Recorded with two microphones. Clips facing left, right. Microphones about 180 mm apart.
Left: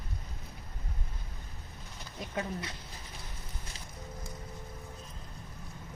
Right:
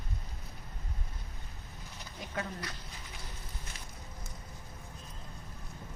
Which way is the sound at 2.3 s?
20° left (ahead or behind).